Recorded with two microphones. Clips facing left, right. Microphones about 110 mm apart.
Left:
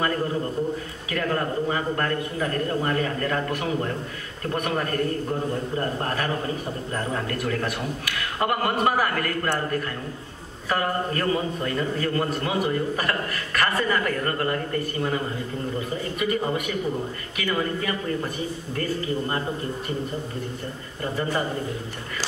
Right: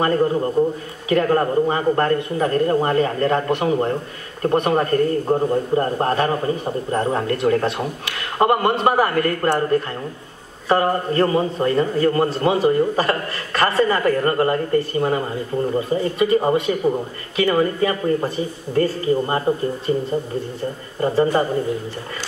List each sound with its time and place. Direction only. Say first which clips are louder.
0.0 s a man's voice: right 7 dB; 35° right (ahead or behind)